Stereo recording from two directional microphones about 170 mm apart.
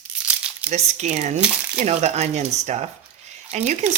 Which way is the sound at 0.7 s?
40° right (ahead or behind).